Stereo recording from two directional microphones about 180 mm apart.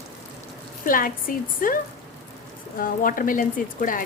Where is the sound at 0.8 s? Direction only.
50° left (ahead or behind).